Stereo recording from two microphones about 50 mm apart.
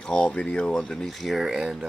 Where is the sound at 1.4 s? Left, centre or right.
Centre.